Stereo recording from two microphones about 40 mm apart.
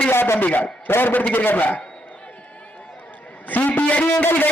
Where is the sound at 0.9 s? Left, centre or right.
Left.